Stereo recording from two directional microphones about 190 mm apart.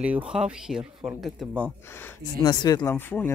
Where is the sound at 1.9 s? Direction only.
10° left (ahead or behind).